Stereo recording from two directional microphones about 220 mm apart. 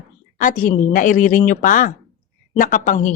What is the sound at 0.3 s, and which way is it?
Speech, 35° left (ahead or behind).